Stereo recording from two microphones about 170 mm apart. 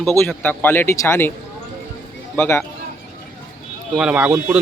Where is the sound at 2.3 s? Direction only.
15° left (ahead or behind).